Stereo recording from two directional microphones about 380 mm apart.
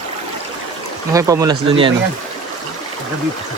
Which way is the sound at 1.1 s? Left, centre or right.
Centre.